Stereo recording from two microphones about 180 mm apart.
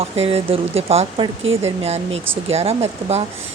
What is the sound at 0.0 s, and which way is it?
A woman's voice, 35° right (ahead or behind).